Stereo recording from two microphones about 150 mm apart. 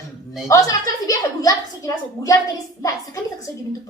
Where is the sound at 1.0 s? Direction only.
20° left (ahead or behind).